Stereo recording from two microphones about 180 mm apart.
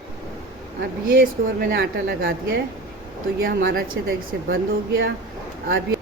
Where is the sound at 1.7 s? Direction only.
60° right (ahead or behind).